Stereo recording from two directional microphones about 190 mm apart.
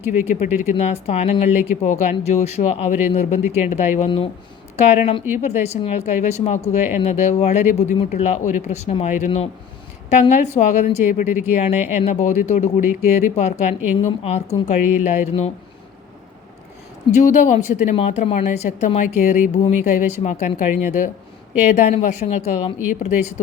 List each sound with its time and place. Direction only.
0.7 s a woman's voice: 35° left (ahead or behind)
12.8 s speech: 10° right (ahead or behind)
13.3 s a woman's voice: 35° left (ahead or behind)
17.1 s a woman's voice: 40° left (ahead or behind)